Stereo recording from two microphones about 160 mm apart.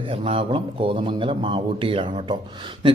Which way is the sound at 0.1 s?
35° right (ahead or behind).